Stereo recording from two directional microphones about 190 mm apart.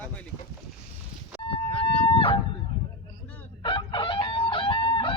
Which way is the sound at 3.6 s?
25° left (ahead or behind).